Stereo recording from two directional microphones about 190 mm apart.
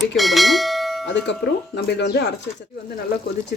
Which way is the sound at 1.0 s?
70° left (ahead or behind).